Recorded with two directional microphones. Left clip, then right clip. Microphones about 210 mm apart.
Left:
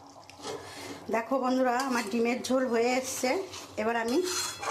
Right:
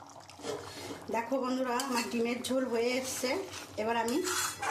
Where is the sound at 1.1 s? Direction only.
15° left (ahead or behind).